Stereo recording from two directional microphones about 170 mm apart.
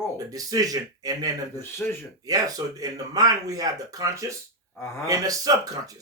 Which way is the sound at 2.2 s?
20° right (ahead or behind).